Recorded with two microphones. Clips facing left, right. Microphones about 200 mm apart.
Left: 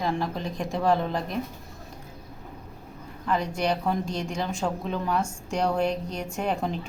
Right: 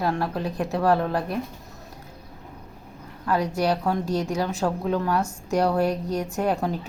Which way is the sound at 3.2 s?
5° right (ahead or behind).